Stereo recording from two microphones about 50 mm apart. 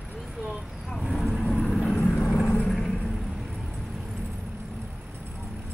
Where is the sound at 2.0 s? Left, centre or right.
Left.